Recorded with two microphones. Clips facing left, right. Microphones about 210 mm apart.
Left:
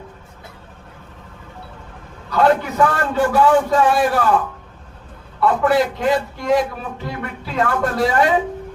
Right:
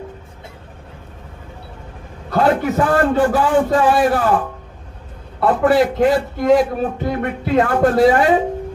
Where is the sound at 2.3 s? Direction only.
45° right (ahead or behind).